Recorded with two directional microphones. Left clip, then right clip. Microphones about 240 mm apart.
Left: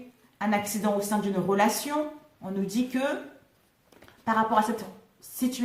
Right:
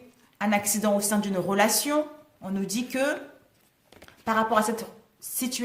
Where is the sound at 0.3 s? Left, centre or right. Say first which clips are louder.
Right 2 dB; right.